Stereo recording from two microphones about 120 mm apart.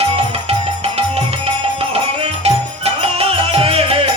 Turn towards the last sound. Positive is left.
turn(degrees=-50)  # may be behind; listen again after turning